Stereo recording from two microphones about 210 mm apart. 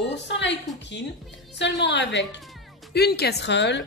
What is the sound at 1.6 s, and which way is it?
A woman's voice, 55° left (ahead or behind).